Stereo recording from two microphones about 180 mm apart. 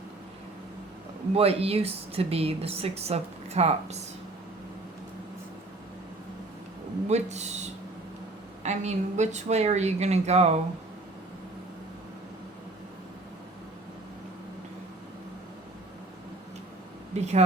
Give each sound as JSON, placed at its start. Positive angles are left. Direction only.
{"t": 1.4, "sound": "a woman's voice", "side_deg": -35}
{"t": 7.1, "sound": "a woman's voice", "side_deg": -40}
{"t": 17.2, "sound": "a woman's voice", "side_deg": -40}